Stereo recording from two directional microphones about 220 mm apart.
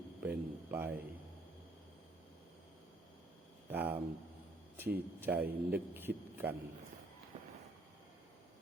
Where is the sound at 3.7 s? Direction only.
10° right (ahead or behind).